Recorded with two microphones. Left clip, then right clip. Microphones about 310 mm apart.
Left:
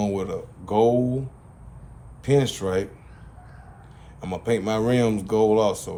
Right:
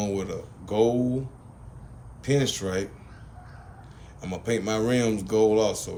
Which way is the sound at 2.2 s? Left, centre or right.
Left.